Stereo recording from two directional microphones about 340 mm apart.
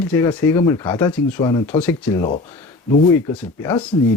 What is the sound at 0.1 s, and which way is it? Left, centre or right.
Speech, centre.